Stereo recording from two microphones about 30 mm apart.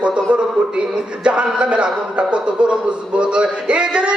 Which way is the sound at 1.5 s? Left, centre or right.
Right.